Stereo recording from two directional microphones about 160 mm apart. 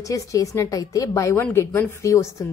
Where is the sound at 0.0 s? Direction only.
20° left (ahead or behind).